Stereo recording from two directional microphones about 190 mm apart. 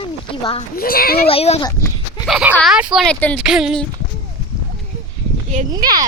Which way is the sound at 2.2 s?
5° right (ahead or behind).